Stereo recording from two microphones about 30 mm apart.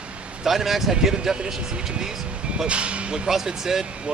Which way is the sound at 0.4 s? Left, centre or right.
Centre.